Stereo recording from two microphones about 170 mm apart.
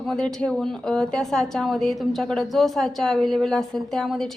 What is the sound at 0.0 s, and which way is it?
A woman's voice, centre (ahead or behind).